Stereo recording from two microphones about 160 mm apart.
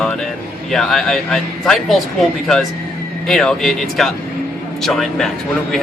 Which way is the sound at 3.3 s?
5° left (ahead or behind).